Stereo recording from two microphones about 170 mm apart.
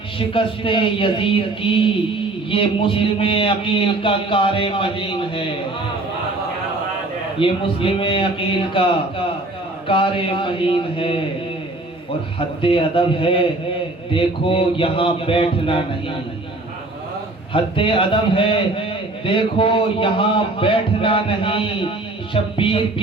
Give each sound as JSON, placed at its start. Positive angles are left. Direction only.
{"t": 0.3, "sound": "a man's voice", "side_deg": 30}
{"t": 7.3, "sound": "a man's voice", "side_deg": 30}
{"t": 12.6, "sound": "a man's voice", "side_deg": 30}
{"t": 17.5, "sound": "a man's voice", "side_deg": 30}